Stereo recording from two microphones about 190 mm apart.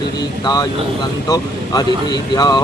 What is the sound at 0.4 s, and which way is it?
Speech, 20° left (ahead or behind).